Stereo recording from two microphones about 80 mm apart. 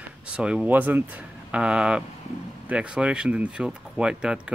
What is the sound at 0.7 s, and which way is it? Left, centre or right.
Speech, right.